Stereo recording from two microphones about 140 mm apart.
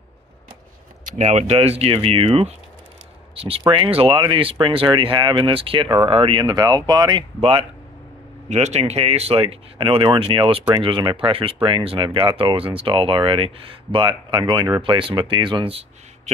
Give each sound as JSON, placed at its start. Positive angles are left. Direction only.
{"t": 1.0, "sound": "speech", "side_deg": -55}
{"t": 8.5, "sound": "speech", "side_deg": -55}